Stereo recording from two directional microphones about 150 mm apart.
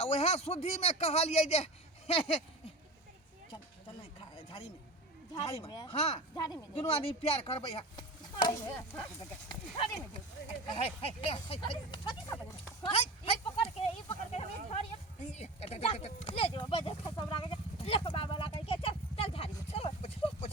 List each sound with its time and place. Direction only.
0.0 s speech: 45° left (ahead or behind)
5.4 s a woman's voice: 40° left (ahead or behind)
5.7 s speech: 25° left (ahead or behind)
6.0 s speech: 45° left (ahead or behind)
6.3 s speech: 25° left (ahead or behind)
6.7 s a woman's voice: 40° left (ahead or behind)
8.5 s speech: 15° left (ahead or behind)
10.8 s a woman's voice: 40° left (ahead or behind)
12.8 s a sound: 40° left (ahead or behind)